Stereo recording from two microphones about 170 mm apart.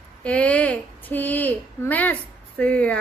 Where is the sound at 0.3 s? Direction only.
5° left (ahead or behind).